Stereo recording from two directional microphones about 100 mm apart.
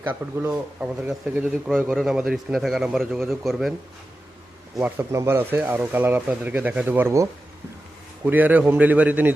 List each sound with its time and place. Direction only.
0.0 s speech: 15° right (ahead or behind)
4.9 s speech: 30° right (ahead or behind)